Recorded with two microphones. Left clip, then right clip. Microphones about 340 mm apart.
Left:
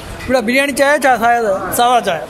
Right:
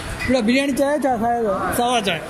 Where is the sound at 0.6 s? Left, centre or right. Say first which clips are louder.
Left 7 dB; left.